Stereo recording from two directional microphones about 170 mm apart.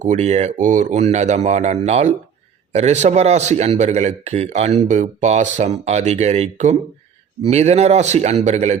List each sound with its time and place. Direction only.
0.0 s a man's voice: 45° right (ahead or behind)